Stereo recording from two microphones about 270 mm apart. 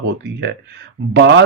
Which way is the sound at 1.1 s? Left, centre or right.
Right.